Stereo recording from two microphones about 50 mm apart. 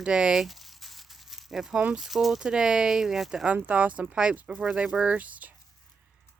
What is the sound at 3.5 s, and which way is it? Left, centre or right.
Speech, right.